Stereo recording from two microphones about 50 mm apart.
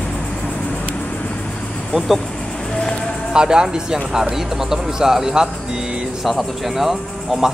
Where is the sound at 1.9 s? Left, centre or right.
Centre.